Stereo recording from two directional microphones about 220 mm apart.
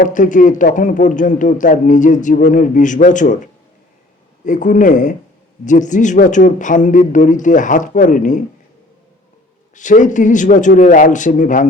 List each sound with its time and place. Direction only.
0.0 s speech: 35° left (ahead or behind)
9.7 s speech: 35° left (ahead or behind)